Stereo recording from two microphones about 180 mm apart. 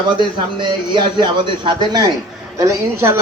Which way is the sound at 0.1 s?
25° right (ahead or behind).